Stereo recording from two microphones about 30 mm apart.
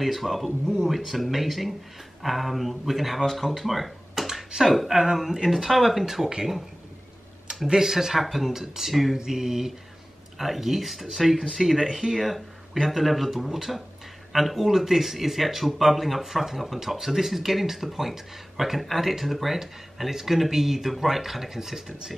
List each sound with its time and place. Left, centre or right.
0.0 s speech: centre
3.6 s cash register: centre
4.6 s speech: centre
4.9 s speech: centre
7.6 s speech: centre
12.2 s speech: centre